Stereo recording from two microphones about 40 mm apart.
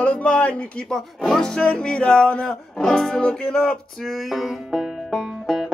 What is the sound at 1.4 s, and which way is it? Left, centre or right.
Music, centre.